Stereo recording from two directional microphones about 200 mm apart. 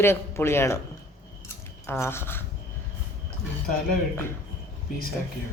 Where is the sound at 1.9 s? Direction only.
10° left (ahead or behind).